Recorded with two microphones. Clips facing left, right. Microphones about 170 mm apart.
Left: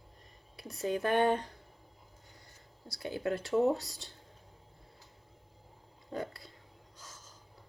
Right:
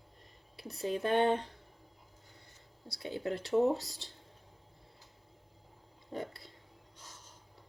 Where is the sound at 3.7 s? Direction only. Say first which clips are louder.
Left 1 dB; centre (ahead or behind).